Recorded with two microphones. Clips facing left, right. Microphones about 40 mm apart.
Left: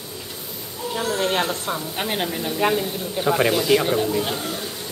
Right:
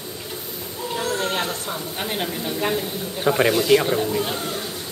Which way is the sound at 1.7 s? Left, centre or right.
Centre.